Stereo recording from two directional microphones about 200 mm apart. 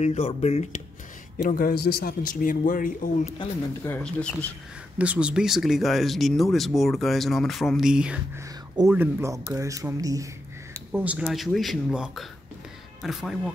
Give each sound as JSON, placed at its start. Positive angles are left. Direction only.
{"t": 0.0, "sound": "speech", "side_deg": 35}
{"t": 1.4, "sound": "a man's voice", "side_deg": 50}
{"t": 3.3, "sound": "speech", "side_deg": 15}
{"t": 4.9, "sound": "speech", "side_deg": -5}
{"t": 10.9, "sound": "speech", "side_deg": -5}